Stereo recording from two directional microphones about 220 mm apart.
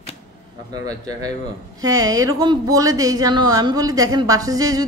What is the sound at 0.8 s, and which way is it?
Speech, 15° right (ahead or behind).